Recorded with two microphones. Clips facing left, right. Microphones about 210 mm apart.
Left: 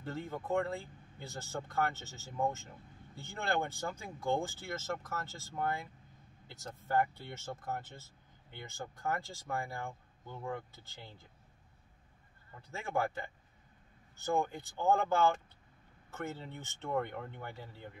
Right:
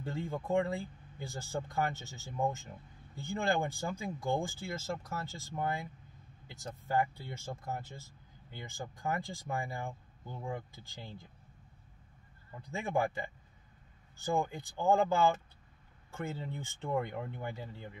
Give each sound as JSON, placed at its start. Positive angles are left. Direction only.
{"t": 0.0, "sound": "speech", "side_deg": -15}
{"t": 12.7, "sound": "speech", "side_deg": -15}
{"t": 14.1, "sound": "speech", "side_deg": -15}